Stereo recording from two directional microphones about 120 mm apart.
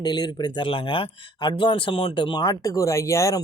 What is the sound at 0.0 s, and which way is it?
Speech, 35° left (ahead or behind).